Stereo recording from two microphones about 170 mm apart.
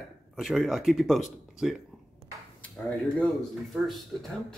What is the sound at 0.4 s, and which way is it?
Speech, centre (ahead or behind).